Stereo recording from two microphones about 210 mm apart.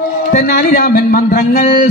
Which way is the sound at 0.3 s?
45° left (ahead or behind).